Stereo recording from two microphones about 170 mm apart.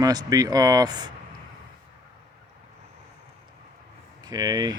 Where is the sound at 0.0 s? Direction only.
20° right (ahead or behind).